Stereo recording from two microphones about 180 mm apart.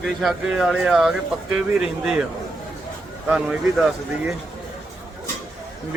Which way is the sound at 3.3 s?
5° right (ahead or behind).